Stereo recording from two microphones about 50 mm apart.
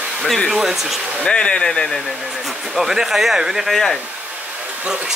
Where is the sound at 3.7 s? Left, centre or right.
Centre.